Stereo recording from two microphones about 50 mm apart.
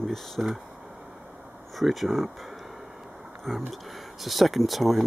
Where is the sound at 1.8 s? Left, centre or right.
Centre.